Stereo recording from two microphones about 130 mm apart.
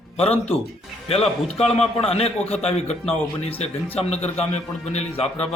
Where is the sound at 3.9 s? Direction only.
55° left (ahead or behind).